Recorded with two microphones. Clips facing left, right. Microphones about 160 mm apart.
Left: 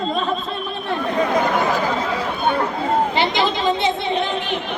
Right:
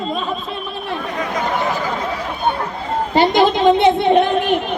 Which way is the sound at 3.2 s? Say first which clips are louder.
Right 6 dB; 50° right (ahead or behind).